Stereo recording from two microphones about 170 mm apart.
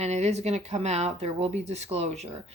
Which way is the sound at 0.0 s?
40° right (ahead or behind).